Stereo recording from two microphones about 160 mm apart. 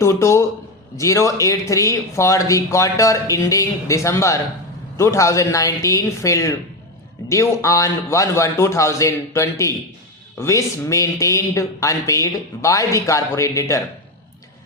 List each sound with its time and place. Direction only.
0.0 s a man's voice: 15° left (ahead or behind)